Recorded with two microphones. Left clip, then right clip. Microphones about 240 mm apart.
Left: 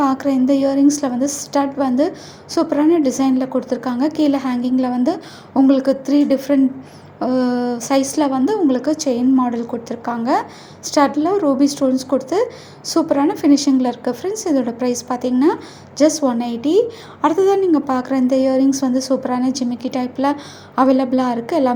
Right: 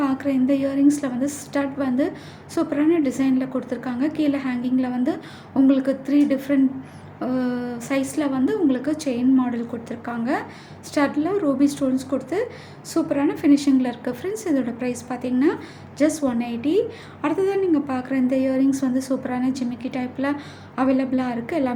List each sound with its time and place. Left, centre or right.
0.0 s a woman's voice: centre